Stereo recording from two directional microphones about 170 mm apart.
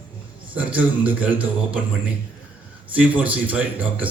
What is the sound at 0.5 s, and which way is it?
A man's voice, 10° right (ahead or behind).